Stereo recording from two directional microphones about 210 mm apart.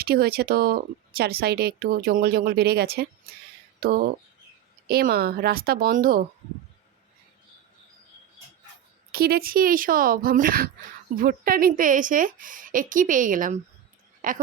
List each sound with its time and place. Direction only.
0.0 s speech: 45° right (ahead or behind)
9.1 s a woman's voice: 45° right (ahead or behind)